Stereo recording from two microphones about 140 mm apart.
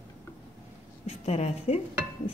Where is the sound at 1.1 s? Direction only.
50° left (ahead or behind).